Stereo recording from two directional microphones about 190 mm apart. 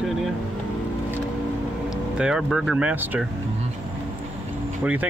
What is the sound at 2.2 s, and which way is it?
Speech, 5° right (ahead or behind).